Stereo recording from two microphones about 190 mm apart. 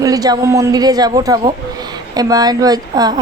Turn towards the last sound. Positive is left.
turn(degrees=-20)  # may be behind; listen again after turning